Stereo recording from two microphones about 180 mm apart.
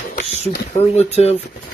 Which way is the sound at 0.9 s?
35° left (ahead or behind).